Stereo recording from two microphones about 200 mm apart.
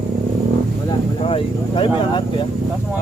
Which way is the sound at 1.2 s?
25° left (ahead or behind).